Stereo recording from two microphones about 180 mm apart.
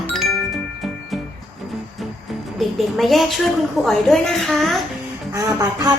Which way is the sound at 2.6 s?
Centre (ahead or behind).